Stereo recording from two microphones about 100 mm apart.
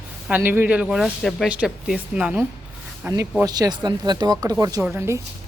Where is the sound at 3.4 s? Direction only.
40° right (ahead or behind).